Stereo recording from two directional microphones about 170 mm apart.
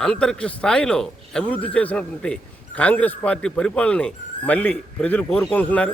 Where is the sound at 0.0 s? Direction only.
5° left (ahead or behind).